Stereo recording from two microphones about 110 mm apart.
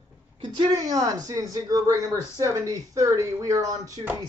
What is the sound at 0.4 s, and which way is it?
Speech, 40° right (ahead or behind).